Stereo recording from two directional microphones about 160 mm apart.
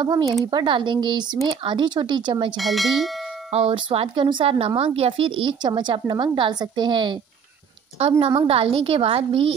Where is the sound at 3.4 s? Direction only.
40° right (ahead or behind).